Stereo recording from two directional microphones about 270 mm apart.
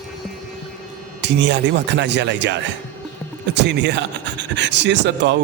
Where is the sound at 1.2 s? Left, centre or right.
Right.